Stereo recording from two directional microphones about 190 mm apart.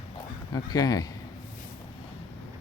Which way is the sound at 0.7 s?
20° left (ahead or behind).